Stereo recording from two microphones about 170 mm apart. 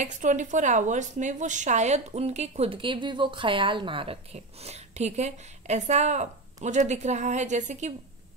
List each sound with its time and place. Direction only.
0.0 s a woman's voice: 45° right (ahead or behind)